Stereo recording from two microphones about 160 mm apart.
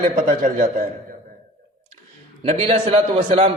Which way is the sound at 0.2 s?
55° right (ahead or behind).